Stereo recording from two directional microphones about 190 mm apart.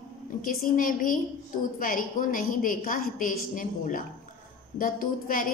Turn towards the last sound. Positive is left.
turn(degrees=45)  # may be behind; listen again after turning